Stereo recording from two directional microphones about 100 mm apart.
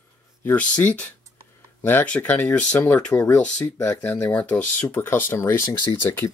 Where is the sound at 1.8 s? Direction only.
15° left (ahead or behind).